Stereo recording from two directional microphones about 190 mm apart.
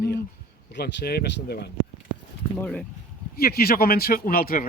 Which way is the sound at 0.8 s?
55° left (ahead or behind).